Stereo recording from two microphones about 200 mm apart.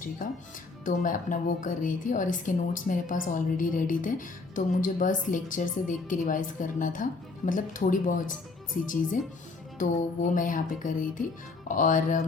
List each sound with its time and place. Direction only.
0.9 s a woman's voice: 40° left (ahead or behind)